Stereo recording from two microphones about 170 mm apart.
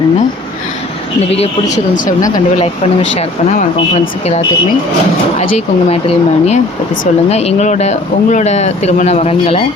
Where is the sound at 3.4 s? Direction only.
40° left (ahead or behind).